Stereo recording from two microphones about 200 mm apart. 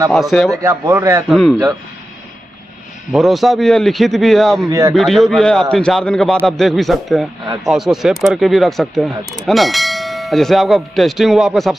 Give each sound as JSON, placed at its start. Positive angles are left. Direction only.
{"t": 0.1, "sound": "a man's voice", "side_deg": 0}
{"t": 0.6, "sound": "speech", "side_deg": -15}
{"t": 3.1, "sound": "a man's voice", "side_deg": 0}
{"t": 4.6, "sound": "speech", "side_deg": -15}
{"t": 4.9, "sound": "a man's voice", "side_deg": 0}
{"t": 9.5, "sound": "church bell", "side_deg": 0}